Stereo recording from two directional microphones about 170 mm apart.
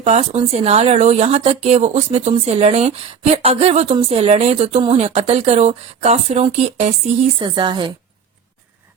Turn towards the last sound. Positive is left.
turn(degrees=-30)  # may be behind; listen again after turning